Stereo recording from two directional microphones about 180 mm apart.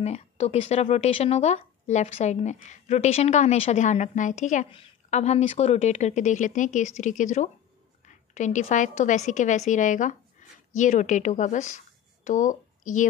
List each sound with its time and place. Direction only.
0.0 s a woman's voice: 35° left (ahead or behind)